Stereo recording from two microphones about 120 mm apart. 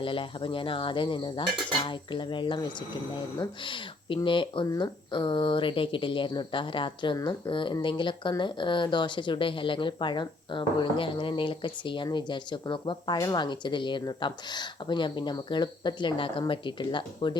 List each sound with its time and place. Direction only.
0.0 s speech: 45° left (ahead or behind)
3.6 s speech: 45° left (ahead or behind)
4.6 s speech: 35° left (ahead or behind)